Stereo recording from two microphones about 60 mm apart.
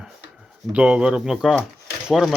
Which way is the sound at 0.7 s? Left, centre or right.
Centre.